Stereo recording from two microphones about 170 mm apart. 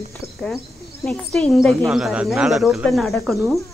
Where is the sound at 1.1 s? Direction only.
5° left (ahead or behind).